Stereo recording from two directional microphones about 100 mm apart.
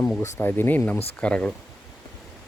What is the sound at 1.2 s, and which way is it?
Speech, 10° left (ahead or behind).